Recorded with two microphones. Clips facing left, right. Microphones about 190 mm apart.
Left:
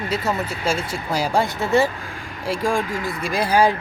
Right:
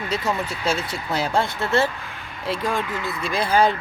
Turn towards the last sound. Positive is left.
turn(degrees=10)  # may be behind; listen again after turning